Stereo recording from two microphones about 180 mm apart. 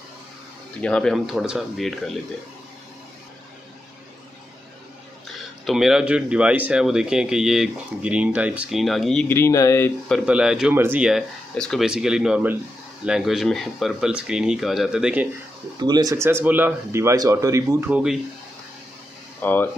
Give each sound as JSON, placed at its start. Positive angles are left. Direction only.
{"t": 0.7, "sound": "speech", "side_deg": 5}
{"t": 5.7, "sound": "speech", "side_deg": 0}
{"t": 9.3, "sound": "speech", "side_deg": 15}
{"t": 10.1, "sound": "speech", "side_deg": -5}
{"t": 15.8, "sound": "speech", "side_deg": -20}
{"t": 19.4, "sound": "speech", "side_deg": 10}